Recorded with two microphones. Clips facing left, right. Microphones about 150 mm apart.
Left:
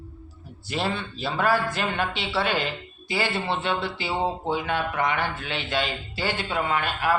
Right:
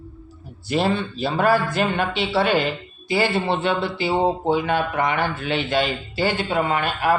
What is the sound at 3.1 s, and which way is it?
Speech, 45° right (ahead or behind).